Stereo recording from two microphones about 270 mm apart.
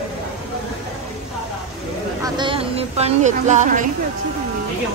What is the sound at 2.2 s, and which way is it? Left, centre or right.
Speech, centre.